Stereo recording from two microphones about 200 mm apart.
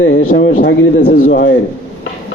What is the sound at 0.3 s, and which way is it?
Speech, 65° left (ahead or behind).